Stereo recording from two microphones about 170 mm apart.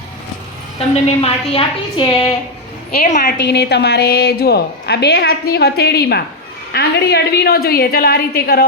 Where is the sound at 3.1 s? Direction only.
50° left (ahead or behind).